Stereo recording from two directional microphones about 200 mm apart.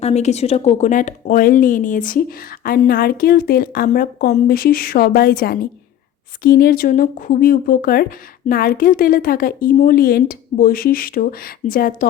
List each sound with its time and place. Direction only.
0.0 s speech: 35° left (ahead or behind)